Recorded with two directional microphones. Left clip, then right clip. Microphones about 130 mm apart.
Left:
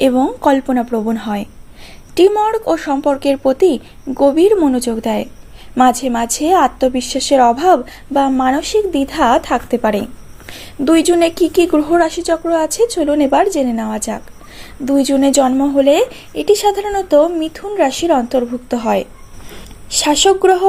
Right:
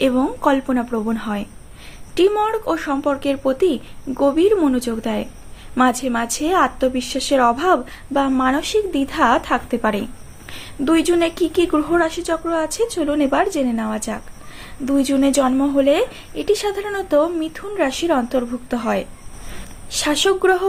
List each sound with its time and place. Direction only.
0.0 s a woman's voice: 35° left (ahead or behind)